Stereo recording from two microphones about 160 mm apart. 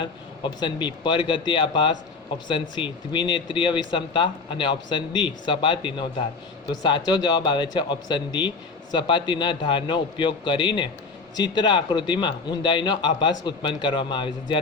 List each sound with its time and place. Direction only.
0.0 s a man's voice: 30° left (ahead or behind)